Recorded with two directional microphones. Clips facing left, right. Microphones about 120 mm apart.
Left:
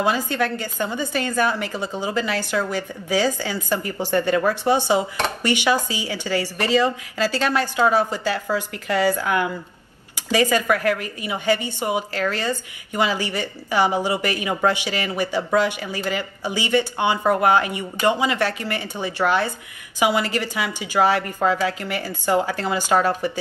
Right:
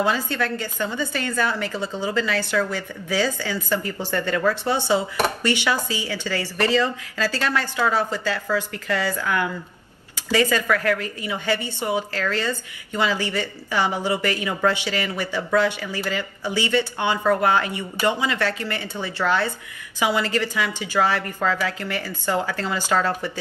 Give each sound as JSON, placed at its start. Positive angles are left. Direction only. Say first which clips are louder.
{"t": 0.0, "sound": "a woman's voice", "louder": "left 1 dB", "side_deg": 15}
{"t": 10.3, "sound": "a woman's voice", "louder": "left 1 dB", "side_deg": 15}